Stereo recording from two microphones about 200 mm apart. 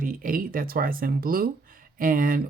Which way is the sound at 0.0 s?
45° right (ahead or behind).